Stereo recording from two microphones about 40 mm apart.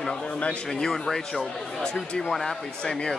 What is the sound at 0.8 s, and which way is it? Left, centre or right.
A man's voice, centre.